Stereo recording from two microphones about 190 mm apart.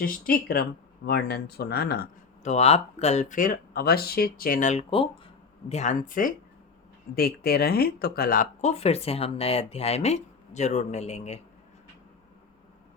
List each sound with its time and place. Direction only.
0.0 s speech: 50° left (ahead or behind)
2.4 s speech: 35° left (ahead or behind)